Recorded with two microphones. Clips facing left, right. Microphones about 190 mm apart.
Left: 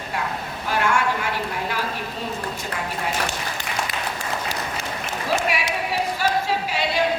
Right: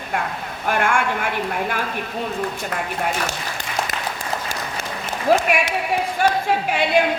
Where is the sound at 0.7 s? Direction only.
50° right (ahead or behind).